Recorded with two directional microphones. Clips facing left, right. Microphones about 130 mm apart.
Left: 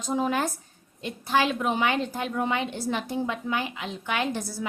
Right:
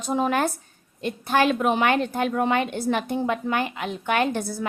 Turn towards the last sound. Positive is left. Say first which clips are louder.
# right 5 dB
turn(degrees=-55)  # may be behind; listen again after turning